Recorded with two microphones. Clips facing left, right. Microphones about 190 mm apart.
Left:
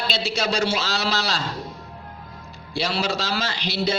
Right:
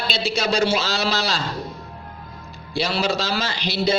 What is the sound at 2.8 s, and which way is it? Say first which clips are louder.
A man's voice: right 2 dB; 15° right (ahead or behind).